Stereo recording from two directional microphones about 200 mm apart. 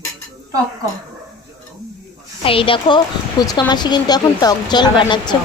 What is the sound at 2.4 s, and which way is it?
Speech, 25° left (ahead or behind).